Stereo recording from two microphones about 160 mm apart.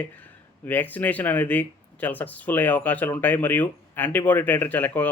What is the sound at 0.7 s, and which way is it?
Speech, 10° left (ahead or behind).